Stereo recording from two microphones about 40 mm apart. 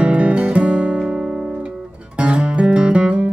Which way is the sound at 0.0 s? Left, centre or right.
Right.